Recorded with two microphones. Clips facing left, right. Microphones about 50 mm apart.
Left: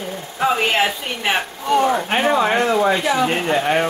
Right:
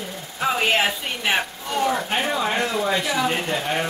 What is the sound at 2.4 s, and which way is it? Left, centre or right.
Speech, left.